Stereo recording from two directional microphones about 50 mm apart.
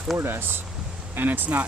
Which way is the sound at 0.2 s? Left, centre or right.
Right.